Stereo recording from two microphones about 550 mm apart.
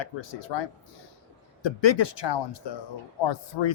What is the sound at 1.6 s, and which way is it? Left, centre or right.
Speech, left.